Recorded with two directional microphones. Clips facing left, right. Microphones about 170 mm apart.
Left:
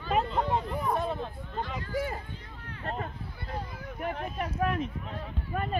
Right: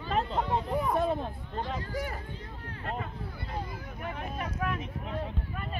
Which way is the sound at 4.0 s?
35° left (ahead or behind).